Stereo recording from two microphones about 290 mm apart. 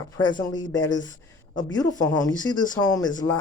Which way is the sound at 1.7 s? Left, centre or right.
Centre.